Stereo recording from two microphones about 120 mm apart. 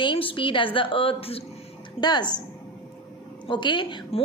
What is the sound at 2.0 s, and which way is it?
Speech, 40° left (ahead or behind).